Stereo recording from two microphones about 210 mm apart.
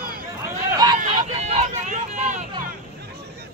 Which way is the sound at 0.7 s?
20° right (ahead or behind).